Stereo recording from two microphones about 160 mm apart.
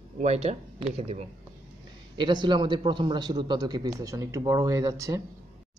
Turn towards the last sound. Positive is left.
turn(degrees=-20)  # may be behind; listen again after turning